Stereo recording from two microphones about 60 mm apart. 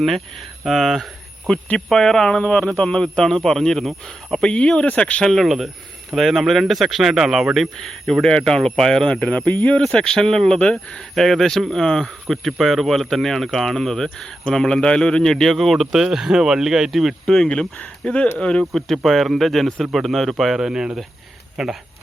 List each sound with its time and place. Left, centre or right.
0.6 s speech: centre; by 5.2 s left
5.2 s speech: centre; by 9.8 s left
9.9 s speech: centre
11.1 s speech: centre
17.5 s speech: centre
18.7 s speech: centre